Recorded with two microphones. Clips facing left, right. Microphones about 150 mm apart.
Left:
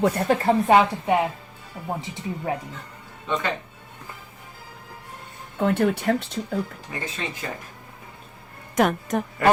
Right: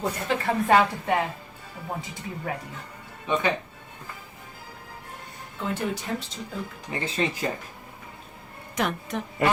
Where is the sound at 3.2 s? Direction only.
10° right (ahead or behind).